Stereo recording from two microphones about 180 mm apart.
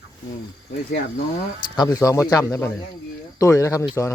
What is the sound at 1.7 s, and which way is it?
Speech, 20° left (ahead or behind).